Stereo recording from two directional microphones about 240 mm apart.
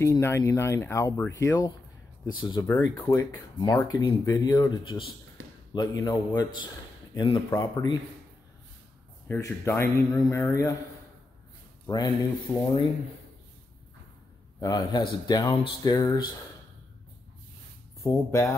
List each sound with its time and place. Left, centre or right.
0.0 s speech: centre
9.3 s speech: centre
11.8 s speech: centre
14.6 s speech: centre
18.0 s speech: centre